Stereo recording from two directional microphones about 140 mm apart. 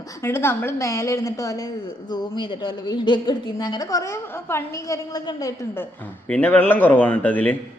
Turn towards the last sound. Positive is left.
turn(degrees=10)  # may be behind; listen again after turning